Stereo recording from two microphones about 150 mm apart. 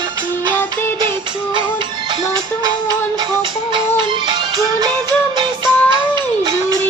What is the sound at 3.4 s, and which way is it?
Music, 30° right (ahead or behind).